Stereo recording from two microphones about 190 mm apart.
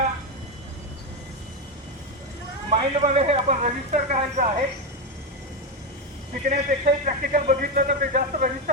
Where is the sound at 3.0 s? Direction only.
35° right (ahead or behind).